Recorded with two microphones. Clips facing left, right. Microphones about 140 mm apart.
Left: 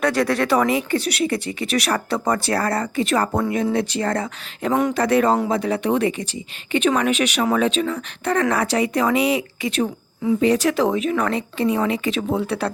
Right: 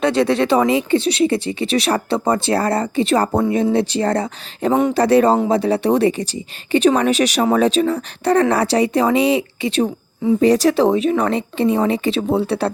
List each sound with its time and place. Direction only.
0.0 s speech: 25° right (ahead or behind)